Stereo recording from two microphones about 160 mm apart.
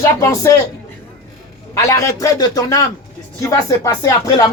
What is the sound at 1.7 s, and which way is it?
Speech, 20° left (ahead or behind).